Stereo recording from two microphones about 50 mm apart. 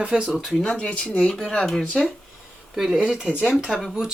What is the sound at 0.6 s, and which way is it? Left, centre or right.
Speech, centre.